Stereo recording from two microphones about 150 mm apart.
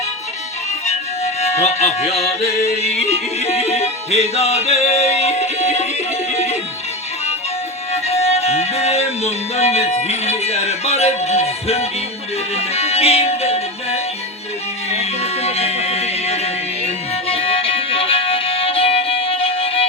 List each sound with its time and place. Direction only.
0.9 s music: 45° left (ahead or behind)
7.9 s music: 45° left (ahead or behind)